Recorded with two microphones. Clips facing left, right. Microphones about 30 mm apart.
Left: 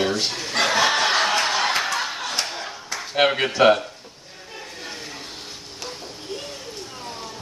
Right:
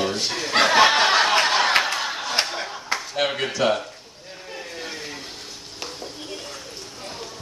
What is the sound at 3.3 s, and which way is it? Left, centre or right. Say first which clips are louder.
Speech: left 6 dB; left.